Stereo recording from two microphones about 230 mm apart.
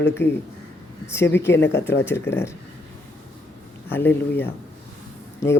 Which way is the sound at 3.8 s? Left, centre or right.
Centre.